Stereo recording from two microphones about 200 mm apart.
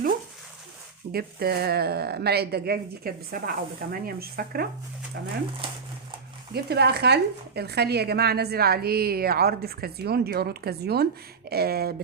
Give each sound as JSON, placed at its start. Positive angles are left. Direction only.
{"t": 1.1, "sound": "speech", "side_deg": -50}
{"t": 6.5, "sound": "speech", "side_deg": -55}